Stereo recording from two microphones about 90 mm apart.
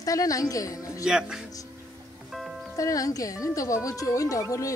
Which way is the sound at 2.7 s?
40° left (ahead or behind).